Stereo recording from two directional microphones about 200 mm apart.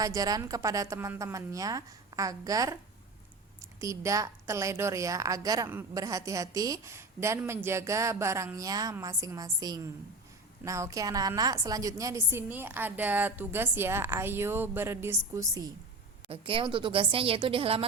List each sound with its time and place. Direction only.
0.0 s a woman's voice: 20° right (ahead or behind)
3.8 s a woman's voice: 15° right (ahead or behind)
16.3 s a woman's voice: 25° right (ahead or behind)